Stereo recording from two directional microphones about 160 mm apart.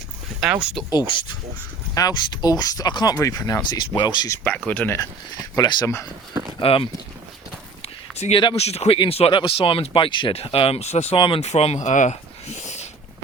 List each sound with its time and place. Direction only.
0.3 s speech: 5° right (ahead or behind)
0.9 s speech: 25° left (ahead or behind)
4.4 s speech: 10° left (ahead or behind)
5.5 s speech: 20° left (ahead or behind)
6.6 s speech: 35° left (ahead or behind)
8.1 s speech: 40° left (ahead or behind)